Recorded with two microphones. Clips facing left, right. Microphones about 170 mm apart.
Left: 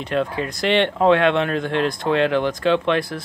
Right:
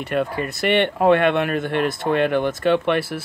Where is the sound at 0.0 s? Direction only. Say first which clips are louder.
Even; 5° right (ahead or behind).